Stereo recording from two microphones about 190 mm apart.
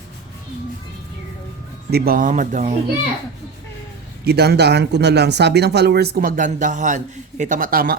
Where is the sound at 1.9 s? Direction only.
55° right (ahead or behind).